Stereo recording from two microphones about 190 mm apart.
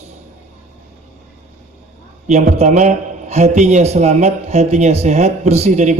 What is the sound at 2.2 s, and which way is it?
A man's voice, 35° right (ahead or behind).